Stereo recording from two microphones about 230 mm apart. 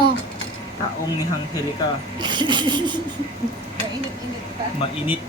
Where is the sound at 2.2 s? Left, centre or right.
Centre.